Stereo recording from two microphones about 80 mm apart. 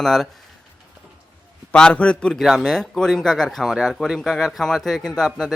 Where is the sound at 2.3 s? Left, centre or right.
Centre.